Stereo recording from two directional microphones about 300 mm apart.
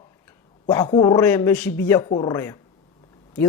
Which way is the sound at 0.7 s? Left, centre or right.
Centre.